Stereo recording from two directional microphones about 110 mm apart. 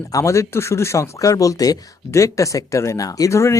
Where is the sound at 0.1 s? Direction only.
30° left (ahead or behind).